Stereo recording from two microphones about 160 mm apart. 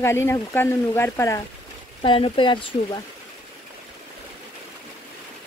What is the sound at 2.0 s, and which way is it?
Speech, 35° left (ahead or behind).